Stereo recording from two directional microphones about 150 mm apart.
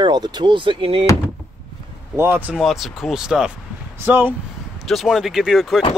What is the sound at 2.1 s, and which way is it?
Speech, 15° right (ahead or behind).